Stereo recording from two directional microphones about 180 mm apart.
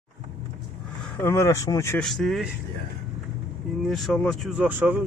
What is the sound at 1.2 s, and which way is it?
Speech, 15° left (ahead or behind).